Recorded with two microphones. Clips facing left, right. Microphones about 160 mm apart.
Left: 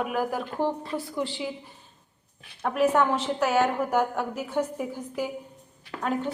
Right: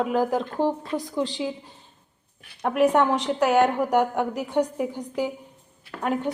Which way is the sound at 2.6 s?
15° right (ahead or behind).